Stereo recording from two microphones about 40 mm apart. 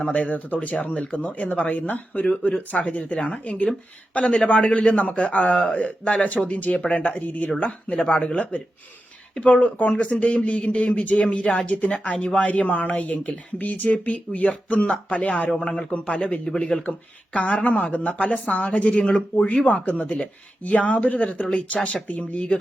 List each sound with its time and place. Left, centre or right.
0.0 s a man's voice: left
16.5 s speech: centre
17.4 s a man's voice: left
19.0 s speech: left
19.6 s a man's voice: left